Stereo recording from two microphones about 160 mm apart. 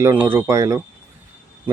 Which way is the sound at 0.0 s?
10° right (ahead or behind).